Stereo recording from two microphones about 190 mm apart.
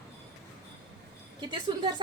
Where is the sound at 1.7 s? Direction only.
25° right (ahead or behind).